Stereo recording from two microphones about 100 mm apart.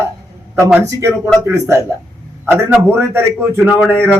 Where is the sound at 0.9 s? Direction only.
30° right (ahead or behind).